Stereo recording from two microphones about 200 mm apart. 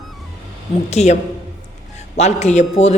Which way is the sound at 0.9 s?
35° left (ahead or behind).